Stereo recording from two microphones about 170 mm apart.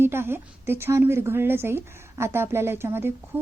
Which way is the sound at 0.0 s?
15° right (ahead or behind).